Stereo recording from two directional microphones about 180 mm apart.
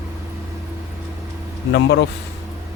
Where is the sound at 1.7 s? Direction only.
70° left (ahead or behind).